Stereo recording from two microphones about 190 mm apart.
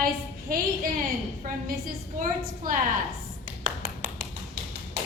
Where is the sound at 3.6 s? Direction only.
45° right (ahead or behind).